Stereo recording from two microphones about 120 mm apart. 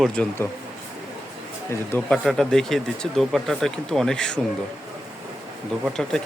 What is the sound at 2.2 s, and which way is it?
Speech, 5° left (ahead or behind).